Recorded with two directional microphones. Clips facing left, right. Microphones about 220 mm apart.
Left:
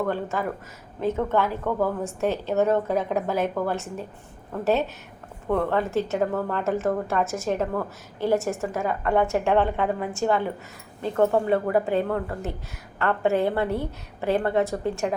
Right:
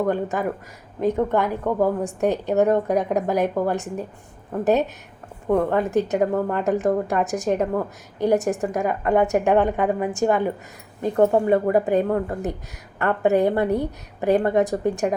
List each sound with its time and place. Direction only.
0.0 s a woman's voice: 15° right (ahead or behind)